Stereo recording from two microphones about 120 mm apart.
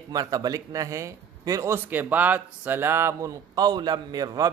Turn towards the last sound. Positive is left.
turn(degrees=-30)  # may be behind; listen again after turning